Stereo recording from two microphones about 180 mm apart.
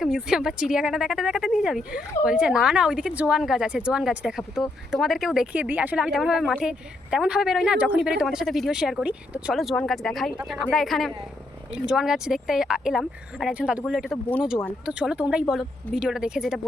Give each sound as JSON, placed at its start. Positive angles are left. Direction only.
{"t": 0.0, "sound": "speech", "side_deg": -5}